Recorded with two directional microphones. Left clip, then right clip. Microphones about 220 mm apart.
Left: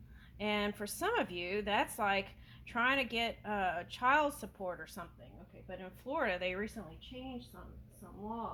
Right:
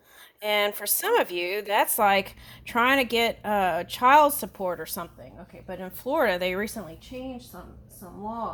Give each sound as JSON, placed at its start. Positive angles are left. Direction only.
{"t": 0.4, "sound": "speech", "side_deg": -50}